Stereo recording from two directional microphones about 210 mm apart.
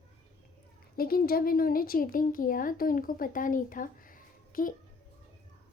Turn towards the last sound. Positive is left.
turn(degrees=40)  # may be behind; listen again after turning